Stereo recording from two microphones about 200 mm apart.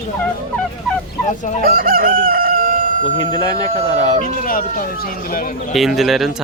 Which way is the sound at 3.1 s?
20° left (ahead or behind).